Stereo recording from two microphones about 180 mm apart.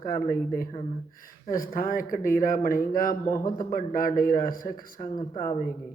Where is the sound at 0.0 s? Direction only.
55° left (ahead or behind).